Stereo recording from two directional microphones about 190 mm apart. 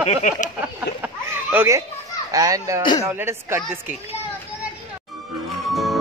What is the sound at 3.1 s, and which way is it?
Speech, 15° right (ahead or behind).